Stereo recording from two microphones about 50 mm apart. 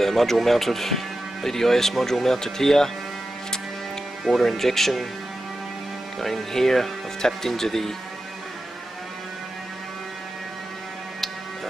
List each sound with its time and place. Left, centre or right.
0.0 s speech: centre
4.2 s speech: centre
6.2 s speech: centre